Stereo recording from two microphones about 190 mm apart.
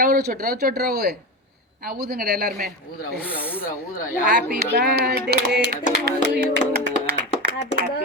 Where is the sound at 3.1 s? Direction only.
10° left (ahead or behind).